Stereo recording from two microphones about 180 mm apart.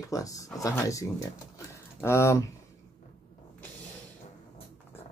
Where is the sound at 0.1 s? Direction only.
20° left (ahead or behind).